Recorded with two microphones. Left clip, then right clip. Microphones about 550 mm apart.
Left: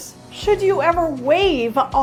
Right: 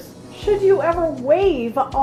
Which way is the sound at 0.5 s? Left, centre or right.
Left.